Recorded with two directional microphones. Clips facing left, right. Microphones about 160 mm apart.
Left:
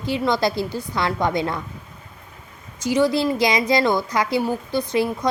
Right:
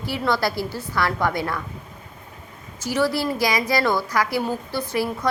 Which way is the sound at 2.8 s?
15° left (ahead or behind).